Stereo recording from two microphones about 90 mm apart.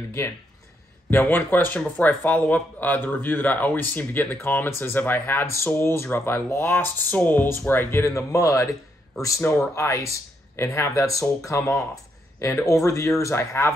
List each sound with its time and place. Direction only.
1.1 s speech: 20° left (ahead or behind)
9.5 s speech: 20° left (ahead or behind)
9.8 s speech: 35° left (ahead or behind)